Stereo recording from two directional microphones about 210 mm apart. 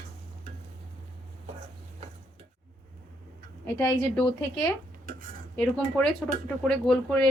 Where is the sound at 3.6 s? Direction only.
10° left (ahead or behind).